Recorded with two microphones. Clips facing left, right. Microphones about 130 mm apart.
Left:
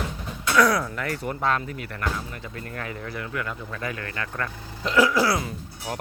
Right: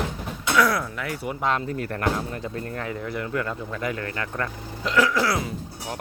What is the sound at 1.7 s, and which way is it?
Speech, 40° right (ahead or behind).